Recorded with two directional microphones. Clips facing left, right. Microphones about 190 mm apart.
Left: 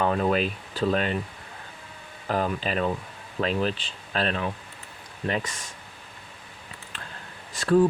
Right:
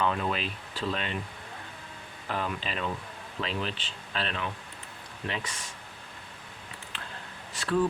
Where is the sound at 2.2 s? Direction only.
40° left (ahead or behind).